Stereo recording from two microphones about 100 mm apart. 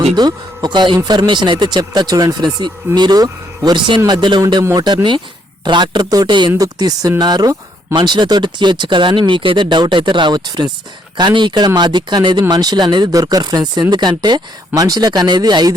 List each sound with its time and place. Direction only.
0.2 s speech: 45° right (ahead or behind)
5.6 s speech: 50° right (ahead or behind)
6.6 s speech: 40° right (ahead or behind)